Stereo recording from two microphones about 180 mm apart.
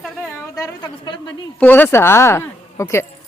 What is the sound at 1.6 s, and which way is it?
A woman's voice, 10° left (ahead or behind).